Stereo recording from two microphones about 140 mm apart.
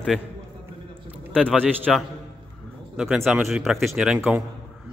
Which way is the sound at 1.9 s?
Centre (ahead or behind).